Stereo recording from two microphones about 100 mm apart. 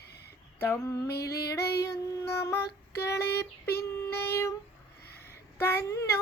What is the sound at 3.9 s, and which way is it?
Child singing, 25° left (ahead or behind).